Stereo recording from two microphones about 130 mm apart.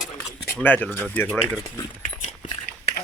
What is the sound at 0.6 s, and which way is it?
Speech, 15° left (ahead or behind).